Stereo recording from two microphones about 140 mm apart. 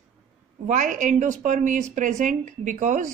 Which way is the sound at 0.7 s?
65° right (ahead or behind).